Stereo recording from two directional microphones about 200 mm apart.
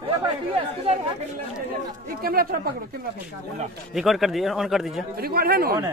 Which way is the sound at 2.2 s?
50° right (ahead or behind).